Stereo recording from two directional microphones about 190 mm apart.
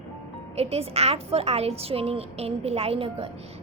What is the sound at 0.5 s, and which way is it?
A woman's voice, 30° right (ahead or behind).